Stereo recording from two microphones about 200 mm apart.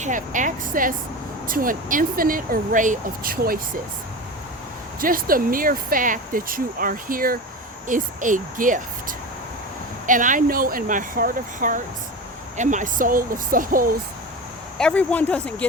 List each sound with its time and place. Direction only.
0.0 s speech: 40° right (ahead or behind)
4.9 s speech: 45° right (ahead or behind)
14.8 s speech: 5° left (ahead or behind)